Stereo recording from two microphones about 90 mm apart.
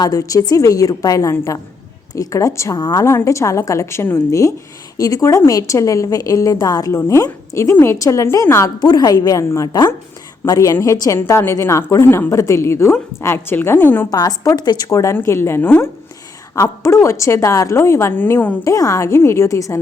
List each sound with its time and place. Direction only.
0.0 s a woman's voice: 40° left (ahead or behind)
2.7 s a woman's voice: 50° left (ahead or behind)
3.0 s a woman's voice: 35° left (ahead or behind)
8.8 s a woman's voice: 50° left (ahead or behind); by 14.1 s 20° left (ahead or behind)
14.1 s a woman's voice: 45° left (ahead or behind)
14.8 s a woman's voice: 35° left (ahead or behind)
16.6 s a woman's voice: 35° left (ahead or behind)
18.2 s a woman's voice: 20° left (ahead or behind)
18.6 s a woman's voice: 40° left (ahead or behind)